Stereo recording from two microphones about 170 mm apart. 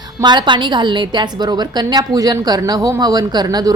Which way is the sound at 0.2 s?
25° right (ahead or behind).